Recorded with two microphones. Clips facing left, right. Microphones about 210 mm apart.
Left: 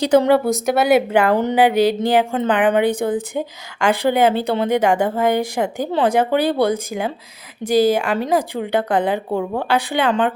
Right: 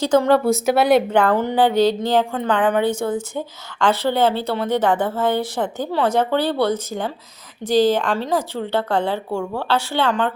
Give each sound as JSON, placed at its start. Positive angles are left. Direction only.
{"t": 0.0, "sound": "a woman's voice", "side_deg": 15}
{"t": 0.3, "sound": "a woman's voice", "side_deg": 0}